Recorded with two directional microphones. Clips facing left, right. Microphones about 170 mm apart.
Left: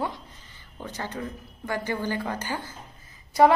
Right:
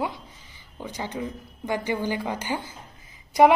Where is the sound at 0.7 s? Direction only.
10° right (ahead or behind).